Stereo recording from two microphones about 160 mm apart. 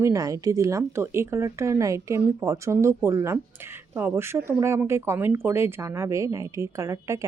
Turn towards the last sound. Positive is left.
turn(degrees=-20)  # may be behind; listen again after turning